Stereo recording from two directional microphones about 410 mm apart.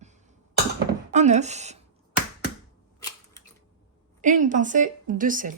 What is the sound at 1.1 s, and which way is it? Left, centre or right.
Speech, centre.